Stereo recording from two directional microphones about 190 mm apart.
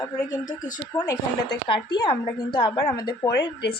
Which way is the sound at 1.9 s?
25° left (ahead or behind).